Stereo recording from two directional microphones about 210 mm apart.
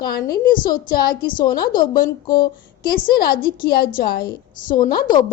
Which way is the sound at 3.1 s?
45° left (ahead or behind).